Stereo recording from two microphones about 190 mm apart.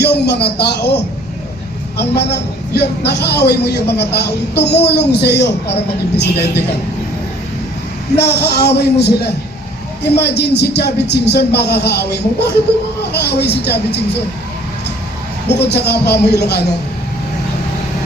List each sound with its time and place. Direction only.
0.0 s a man's voice: 60° left (ahead or behind)
8.1 s a man's voice: 60° left (ahead or behind)
15.4 s a man's voice: 60° left (ahead or behind)